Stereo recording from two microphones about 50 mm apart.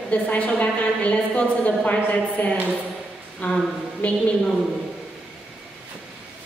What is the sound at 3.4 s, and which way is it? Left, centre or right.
Speech, left.